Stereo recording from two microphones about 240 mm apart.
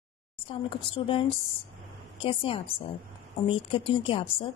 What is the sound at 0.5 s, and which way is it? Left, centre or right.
Speech, left.